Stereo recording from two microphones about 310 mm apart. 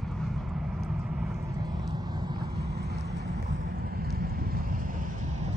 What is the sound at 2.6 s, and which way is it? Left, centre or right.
Vehicle, right.